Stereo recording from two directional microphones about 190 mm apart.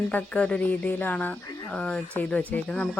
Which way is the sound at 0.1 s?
10° left (ahead or behind).